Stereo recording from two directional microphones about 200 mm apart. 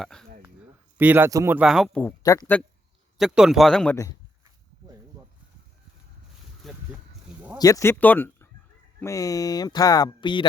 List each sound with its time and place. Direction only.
0.0 s a man's voice: centre (ahead or behind)
0.9 s a man's voice: 10° right (ahead or behind); by 2.6 s 15° left (ahead or behind)
3.2 s a man's voice: centre (ahead or behind)
6.6 s a sound: centre (ahead or behind)
7.6 s speech: 15° left (ahead or behind)